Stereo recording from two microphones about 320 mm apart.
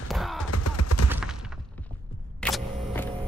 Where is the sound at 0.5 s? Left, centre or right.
Left.